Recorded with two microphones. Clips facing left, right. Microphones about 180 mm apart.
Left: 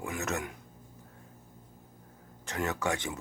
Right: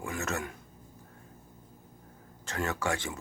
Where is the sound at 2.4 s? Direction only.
15° left (ahead or behind).